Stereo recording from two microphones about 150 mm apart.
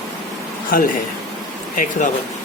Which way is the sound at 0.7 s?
70° left (ahead or behind).